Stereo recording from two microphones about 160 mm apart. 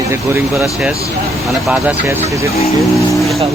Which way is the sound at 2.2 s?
20° right (ahead or behind).